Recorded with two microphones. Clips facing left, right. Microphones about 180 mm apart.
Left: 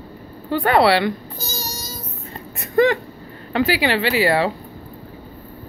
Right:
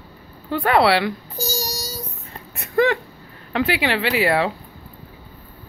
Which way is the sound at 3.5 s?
Centre (ahead or behind).